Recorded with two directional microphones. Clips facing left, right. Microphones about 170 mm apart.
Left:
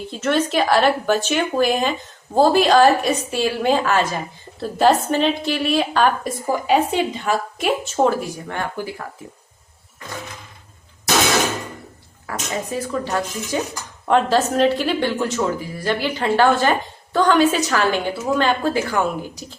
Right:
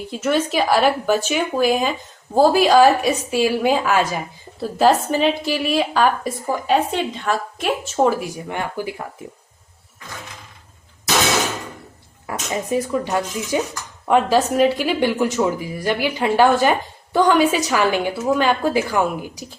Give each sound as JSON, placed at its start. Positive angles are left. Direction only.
{"t": 0.2, "sound": "a woman's voice", "side_deg": -5}
{"t": 8.4, "sound": "speech", "side_deg": -15}
{"t": 12.3, "sound": "speech", "side_deg": -15}